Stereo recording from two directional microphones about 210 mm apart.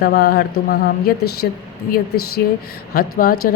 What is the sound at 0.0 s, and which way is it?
Speech, 50° left (ahead or behind).